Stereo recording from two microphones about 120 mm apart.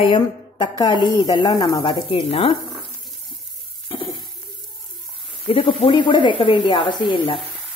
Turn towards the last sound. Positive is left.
turn(degrees=45)  # may be behind; listen again after turning